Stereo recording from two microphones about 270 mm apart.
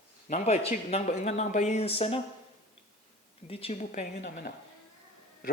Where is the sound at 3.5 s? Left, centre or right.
Left.